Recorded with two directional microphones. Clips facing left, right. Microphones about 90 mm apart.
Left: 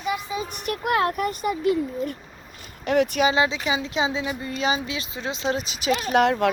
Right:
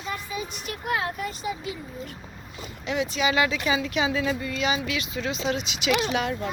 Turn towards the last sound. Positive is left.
turn(degrees=60)  # may be behind; listen again after turning